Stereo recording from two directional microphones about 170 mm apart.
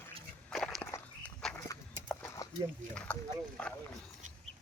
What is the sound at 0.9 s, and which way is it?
Walk, 15° left (ahead or behind).